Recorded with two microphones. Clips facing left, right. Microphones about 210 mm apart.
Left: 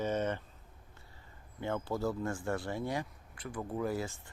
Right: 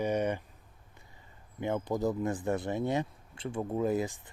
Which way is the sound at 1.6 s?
15° right (ahead or behind).